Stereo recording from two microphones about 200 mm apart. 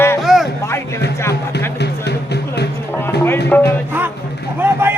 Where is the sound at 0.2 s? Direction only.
Centre (ahead or behind).